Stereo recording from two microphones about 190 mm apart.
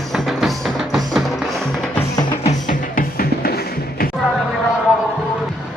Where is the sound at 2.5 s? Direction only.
45° left (ahead or behind).